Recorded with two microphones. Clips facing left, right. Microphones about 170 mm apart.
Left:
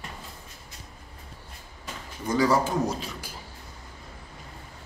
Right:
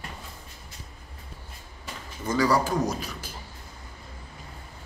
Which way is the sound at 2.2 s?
20° left (ahead or behind).